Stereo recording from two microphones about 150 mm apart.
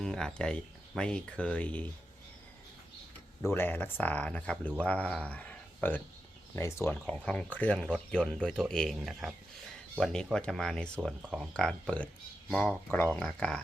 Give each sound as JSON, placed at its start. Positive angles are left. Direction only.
{"t": 0.0, "sound": "speech", "side_deg": 5}
{"t": 3.5, "sound": "speech", "side_deg": 15}
{"t": 11.5, "sound": "speech", "side_deg": 5}